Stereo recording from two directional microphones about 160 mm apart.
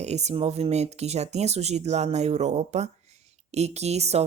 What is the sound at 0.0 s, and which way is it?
Speech, 45° right (ahead or behind).